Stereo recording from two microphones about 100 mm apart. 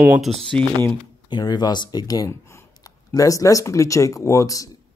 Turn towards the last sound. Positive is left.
turn(degrees=35)  # may be behind; listen again after turning